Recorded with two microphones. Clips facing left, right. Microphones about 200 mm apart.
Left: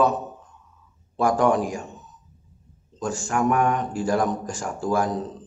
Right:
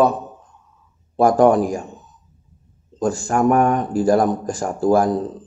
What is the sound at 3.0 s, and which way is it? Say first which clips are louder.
A man's voice: right 6 dB; 35° right (ahead or behind).